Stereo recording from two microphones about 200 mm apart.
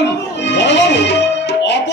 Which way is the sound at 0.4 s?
60° left (ahead or behind).